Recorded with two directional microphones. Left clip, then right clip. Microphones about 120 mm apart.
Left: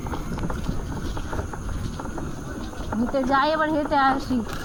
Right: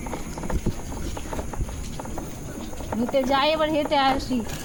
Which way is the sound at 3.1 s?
5° right (ahead or behind).